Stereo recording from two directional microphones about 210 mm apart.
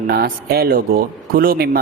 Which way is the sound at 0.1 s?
45° right (ahead or behind).